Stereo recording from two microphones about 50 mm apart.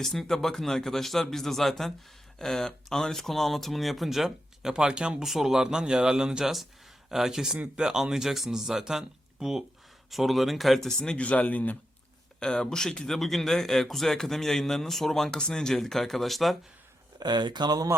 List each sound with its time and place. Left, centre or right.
0.0 s speech: centre
4.7 s speech: centre
5.2 s speech: centre
11.2 s speech: left
12.4 s a man's voice: centre